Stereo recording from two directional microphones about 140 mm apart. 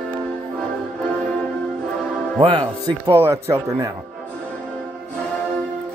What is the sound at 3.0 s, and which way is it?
Speech, 20° right (ahead or behind).